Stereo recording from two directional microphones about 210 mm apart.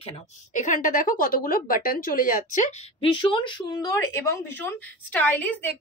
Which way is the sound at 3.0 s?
25° left (ahead or behind).